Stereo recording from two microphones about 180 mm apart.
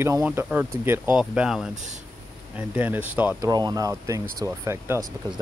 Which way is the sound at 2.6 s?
10° right (ahead or behind).